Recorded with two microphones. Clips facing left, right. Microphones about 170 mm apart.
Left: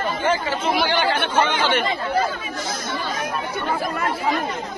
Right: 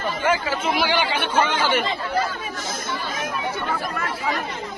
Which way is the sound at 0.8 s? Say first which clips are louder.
Left 2 dB; 50° left (ahead or behind).